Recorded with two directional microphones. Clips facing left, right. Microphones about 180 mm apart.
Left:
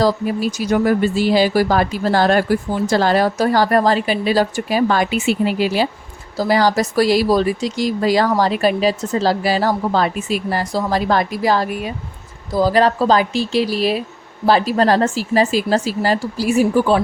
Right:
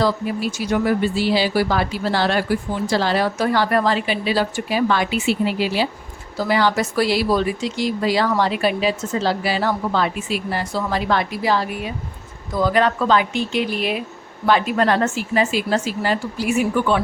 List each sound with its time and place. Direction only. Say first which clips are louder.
0.0 s speech: left 3 dB; 40° left (ahead or behind)